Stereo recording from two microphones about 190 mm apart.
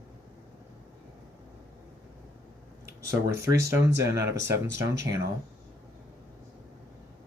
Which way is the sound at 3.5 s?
15° right (ahead or behind).